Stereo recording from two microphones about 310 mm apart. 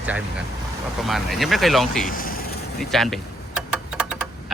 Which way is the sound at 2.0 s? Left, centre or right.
Left.